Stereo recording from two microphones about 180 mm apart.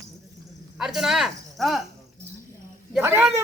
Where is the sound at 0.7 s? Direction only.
5° right (ahead or behind).